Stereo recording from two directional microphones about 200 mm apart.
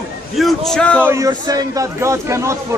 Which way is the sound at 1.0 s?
15° right (ahead or behind).